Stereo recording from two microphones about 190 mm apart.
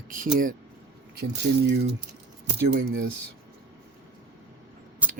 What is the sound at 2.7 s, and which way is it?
Speech, 80° right.